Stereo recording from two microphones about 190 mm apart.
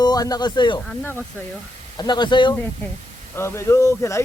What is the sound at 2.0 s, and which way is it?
Speech, 25° left (ahead or behind).